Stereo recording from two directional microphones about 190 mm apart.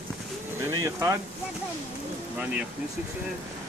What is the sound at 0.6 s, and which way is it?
Speech, 15° right (ahead or behind).